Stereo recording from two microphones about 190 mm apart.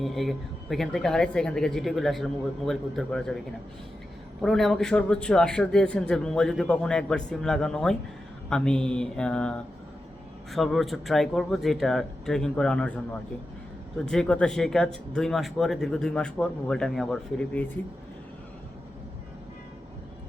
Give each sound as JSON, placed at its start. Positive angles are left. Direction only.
{"t": 0.0, "sound": "a man's voice", "side_deg": 0}
{"t": 4.4, "sound": "a man's voice", "side_deg": 0}
{"t": 14.0, "sound": "a man's voice", "side_deg": 5}